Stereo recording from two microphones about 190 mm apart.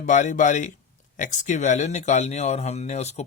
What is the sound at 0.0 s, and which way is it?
Speech, 40° left (ahead or behind).